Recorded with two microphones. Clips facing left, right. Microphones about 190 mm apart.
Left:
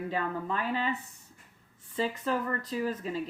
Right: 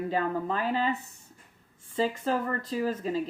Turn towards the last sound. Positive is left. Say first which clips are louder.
# right 3 dB
turn(degrees=-30)  # may be behind; listen again after turning